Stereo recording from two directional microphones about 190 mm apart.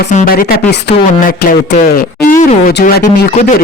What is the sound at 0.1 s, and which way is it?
Speech, 45° left (ahead or behind).